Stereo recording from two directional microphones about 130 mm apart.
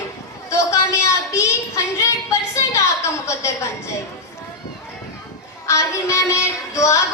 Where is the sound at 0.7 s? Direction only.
25° left (ahead or behind).